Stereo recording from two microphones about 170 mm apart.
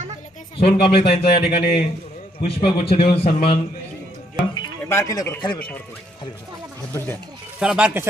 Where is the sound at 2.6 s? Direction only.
35° left (ahead or behind).